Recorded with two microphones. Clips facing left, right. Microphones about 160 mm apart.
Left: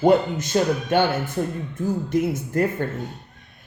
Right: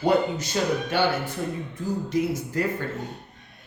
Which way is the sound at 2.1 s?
50° left (ahead or behind).